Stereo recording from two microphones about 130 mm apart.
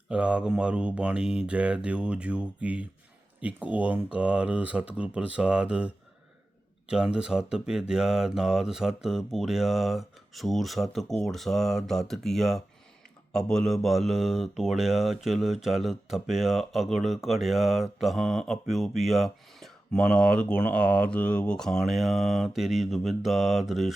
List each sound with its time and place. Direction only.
0.1 s speech: 10° right (ahead or behind)